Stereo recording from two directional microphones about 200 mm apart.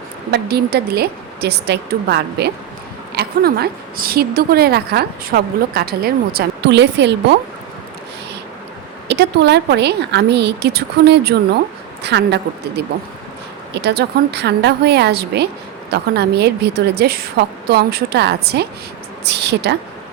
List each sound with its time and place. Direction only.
0.3 s a woman's voice: 55° right (ahead or behind)
9.0 s a woman's voice: 60° right (ahead or behind)